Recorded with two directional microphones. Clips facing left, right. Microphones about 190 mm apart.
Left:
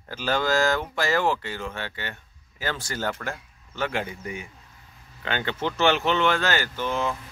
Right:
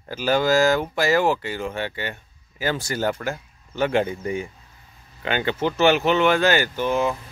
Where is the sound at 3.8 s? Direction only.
25° right (ahead or behind).